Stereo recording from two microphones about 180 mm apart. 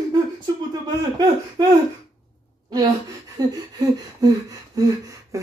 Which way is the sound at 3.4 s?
20° right (ahead or behind).